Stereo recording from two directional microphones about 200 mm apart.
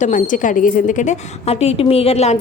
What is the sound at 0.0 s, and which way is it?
A woman's voice, 40° left (ahead or behind).